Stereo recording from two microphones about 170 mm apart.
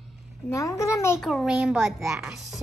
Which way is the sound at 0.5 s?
20° left (ahead or behind).